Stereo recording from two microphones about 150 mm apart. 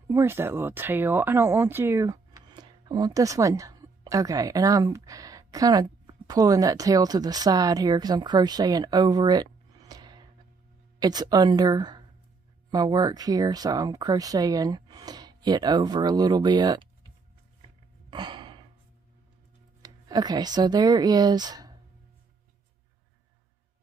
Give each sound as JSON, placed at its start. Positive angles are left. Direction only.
{"t": 0.1, "sound": "speech", "side_deg": -15}
{"t": 18.1, "sound": "a sound", "side_deg": -30}
{"t": 19.8, "sound": "speech", "side_deg": -25}